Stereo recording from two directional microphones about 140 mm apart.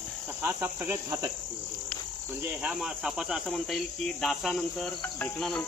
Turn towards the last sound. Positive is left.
turn(degrees=5)  # may be behind; listen again after turning